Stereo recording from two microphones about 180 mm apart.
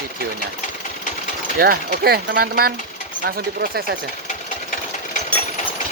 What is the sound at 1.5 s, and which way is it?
Speech, 60° right (ahead or behind).